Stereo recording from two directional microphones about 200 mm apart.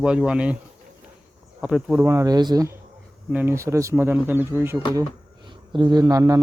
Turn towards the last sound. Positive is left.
turn(degrees=-15)  # may be behind; listen again after turning